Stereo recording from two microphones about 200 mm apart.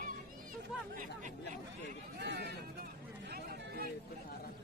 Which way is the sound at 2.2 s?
55° right (ahead or behind).